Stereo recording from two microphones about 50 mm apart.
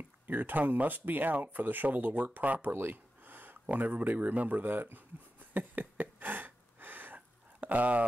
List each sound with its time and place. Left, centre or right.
0.3 s speech: right
2.7 s speech: right
5.5 s a sound: right